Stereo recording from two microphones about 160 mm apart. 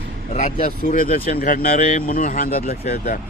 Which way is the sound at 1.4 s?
65° left (ahead or behind).